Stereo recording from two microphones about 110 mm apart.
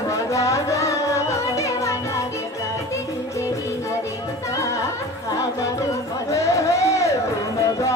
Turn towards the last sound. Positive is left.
turn(degrees=25)  # may be behind; listen again after turning